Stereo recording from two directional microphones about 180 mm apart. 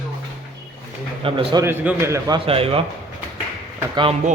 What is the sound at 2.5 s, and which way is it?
Speech, 30° right (ahead or behind).